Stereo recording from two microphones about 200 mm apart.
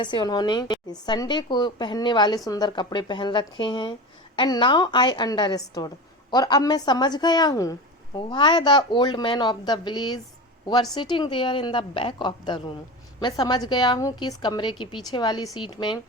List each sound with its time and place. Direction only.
0.0 s a woman's voice: 20° left (ahead or behind)